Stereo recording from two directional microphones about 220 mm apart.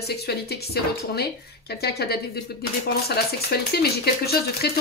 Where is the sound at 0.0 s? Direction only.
45° left (ahead or behind).